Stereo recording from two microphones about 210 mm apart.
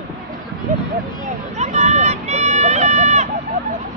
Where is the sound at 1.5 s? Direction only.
35° right (ahead or behind).